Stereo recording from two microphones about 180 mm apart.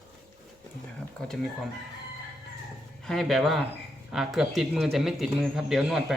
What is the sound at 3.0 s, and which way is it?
A man's voice, centre (ahead or behind).